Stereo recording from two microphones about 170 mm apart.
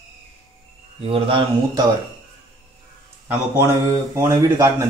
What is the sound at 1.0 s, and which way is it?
Speech, 30° right (ahead or behind).